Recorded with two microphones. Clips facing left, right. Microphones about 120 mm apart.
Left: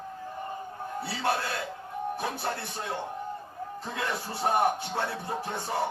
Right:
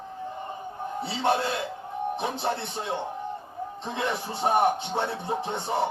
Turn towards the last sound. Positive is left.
turn(degrees=-25)  # may be behind; listen again after turning